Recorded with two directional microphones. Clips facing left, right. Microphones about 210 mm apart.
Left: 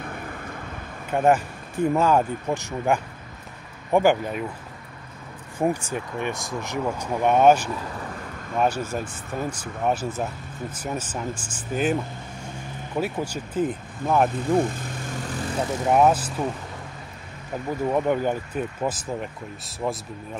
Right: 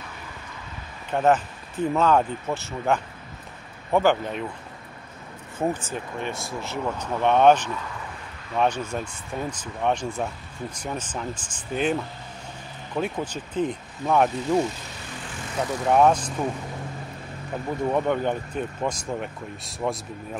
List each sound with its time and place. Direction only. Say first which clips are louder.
1.1 s speech: left 1 dB; 10° left (ahead or behind)
5.6 s speech: left 2 dB; 10° left (ahead or behind)
14.6 s speech: left 2 dB; 50° left (ahead or behind)
15.8 s speech: even; 5° left (ahead or behind)
17.9 s speech: left 2 dB; 5° left (ahead or behind)